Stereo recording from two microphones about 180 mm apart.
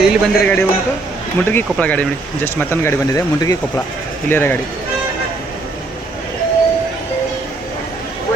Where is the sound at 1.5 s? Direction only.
10° left (ahead or behind).